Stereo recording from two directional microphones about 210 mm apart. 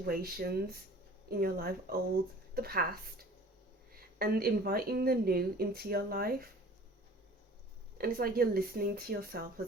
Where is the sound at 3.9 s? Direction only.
45° right (ahead or behind).